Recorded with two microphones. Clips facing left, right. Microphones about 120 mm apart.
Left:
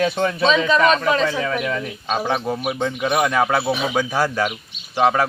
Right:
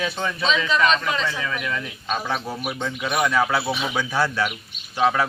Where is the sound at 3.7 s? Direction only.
45° left (ahead or behind).